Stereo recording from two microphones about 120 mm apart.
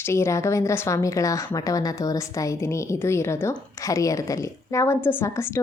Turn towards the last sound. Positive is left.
turn(degrees=20)  # may be behind; listen again after turning